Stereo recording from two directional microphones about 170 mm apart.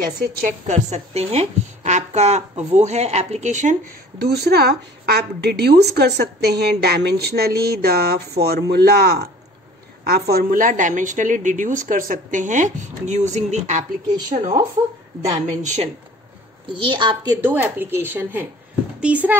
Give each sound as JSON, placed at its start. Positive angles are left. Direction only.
{"t": 0.0, "sound": "a woman's voice", "side_deg": -60}
{"t": 0.8, "sound": "a woman's voice", "side_deg": -40}
{"t": 4.4, "sound": "a woman's voice", "side_deg": -70}
{"t": 15.5, "sound": "a woman's voice", "side_deg": -45}
{"t": 16.7, "sound": "a woman's voice", "side_deg": -30}
{"t": 17.5, "sound": "speech", "side_deg": -10}